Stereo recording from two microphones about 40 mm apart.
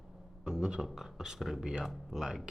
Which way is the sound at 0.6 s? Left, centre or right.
Centre.